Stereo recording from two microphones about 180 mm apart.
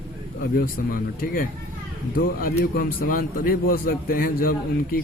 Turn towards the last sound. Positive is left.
turn(degrees=55)  # may be behind; listen again after turning